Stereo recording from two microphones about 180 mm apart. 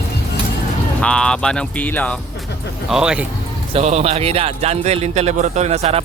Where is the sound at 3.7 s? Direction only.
35° right (ahead or behind).